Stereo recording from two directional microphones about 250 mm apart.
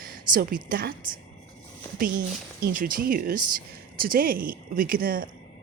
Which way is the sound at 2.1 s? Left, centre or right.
Right.